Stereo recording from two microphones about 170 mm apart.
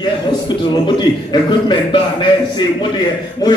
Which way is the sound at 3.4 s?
20° left (ahead or behind).